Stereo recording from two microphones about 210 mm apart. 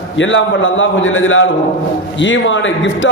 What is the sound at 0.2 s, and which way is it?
Speech, 65° left (ahead or behind).